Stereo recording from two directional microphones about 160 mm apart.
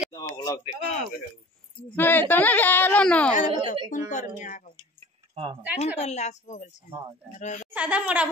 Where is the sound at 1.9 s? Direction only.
10° left (ahead or behind).